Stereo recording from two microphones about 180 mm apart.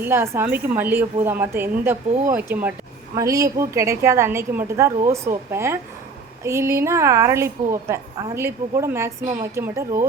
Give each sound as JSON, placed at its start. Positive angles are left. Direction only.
{"t": 0.0, "sound": "a woman's voice", "side_deg": -15}